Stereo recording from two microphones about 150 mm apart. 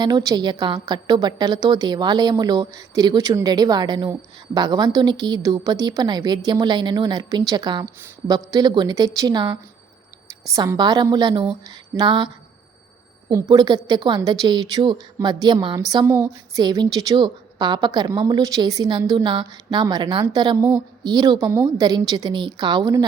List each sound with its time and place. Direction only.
0.0 s a woman's voice: 25° right (ahead or behind)
13.3 s a woman's voice: 25° right (ahead or behind)